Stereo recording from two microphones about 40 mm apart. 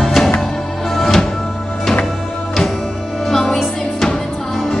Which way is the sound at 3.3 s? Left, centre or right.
Centre.